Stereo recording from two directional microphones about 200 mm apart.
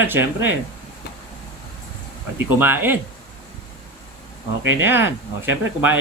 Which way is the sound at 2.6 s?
10° right (ahead or behind).